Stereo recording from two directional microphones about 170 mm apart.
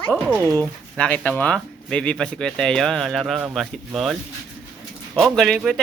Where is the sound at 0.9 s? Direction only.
5° left (ahead or behind).